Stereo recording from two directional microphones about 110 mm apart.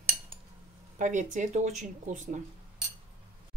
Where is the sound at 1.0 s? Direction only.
90° right.